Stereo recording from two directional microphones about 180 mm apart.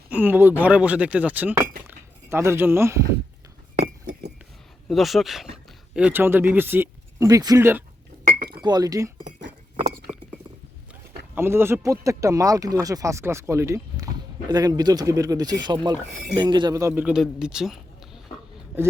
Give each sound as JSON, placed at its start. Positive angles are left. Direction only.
{"t": 0.1, "sound": "speech", "side_deg": -10}
{"t": 1.9, "sound": "a sound", "side_deg": -15}
{"t": 4.9, "sound": "speech", "side_deg": 0}
{"t": 11.3, "sound": "speech", "side_deg": -15}